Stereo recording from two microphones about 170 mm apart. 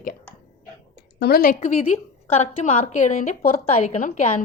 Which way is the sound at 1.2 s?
60° left (ahead or behind).